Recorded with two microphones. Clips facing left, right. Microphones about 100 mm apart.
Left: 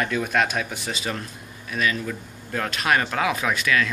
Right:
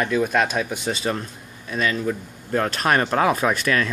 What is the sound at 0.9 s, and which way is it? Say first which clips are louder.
Speech: right 3 dB; 35° right (ahead or behind).